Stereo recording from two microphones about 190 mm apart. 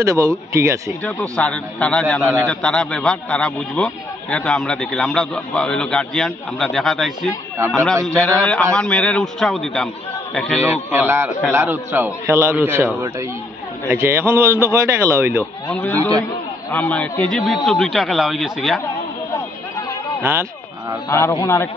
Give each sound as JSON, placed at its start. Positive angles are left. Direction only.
{"t": 0.0, "sound": "a man's voice", "side_deg": -15}
{"t": 1.3, "sound": "a man's voice", "side_deg": 5}
{"t": 7.5, "sound": "a man's voice", "side_deg": -15}
{"t": 8.2, "sound": "a man's voice", "side_deg": 5}
{"t": 10.6, "sound": "a man's voice", "side_deg": -10}
{"t": 15.7, "sound": "a man's voice", "side_deg": 10}
{"t": 20.2, "sound": "speech", "side_deg": -10}
{"t": 21.1, "sound": "a man's voice", "side_deg": 15}